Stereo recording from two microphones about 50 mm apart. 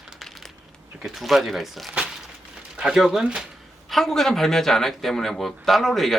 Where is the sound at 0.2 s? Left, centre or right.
Centre.